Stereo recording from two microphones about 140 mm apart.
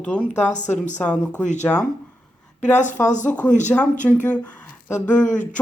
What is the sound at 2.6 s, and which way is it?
Speech, 60° left (ahead or behind).